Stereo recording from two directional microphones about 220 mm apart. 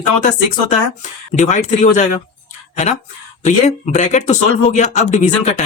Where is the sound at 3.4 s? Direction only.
30° left (ahead or behind).